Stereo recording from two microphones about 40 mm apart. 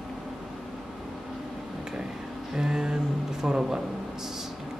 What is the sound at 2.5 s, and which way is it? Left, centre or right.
Speech, centre.